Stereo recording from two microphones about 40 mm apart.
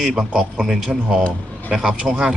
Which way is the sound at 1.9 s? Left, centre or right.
Centre.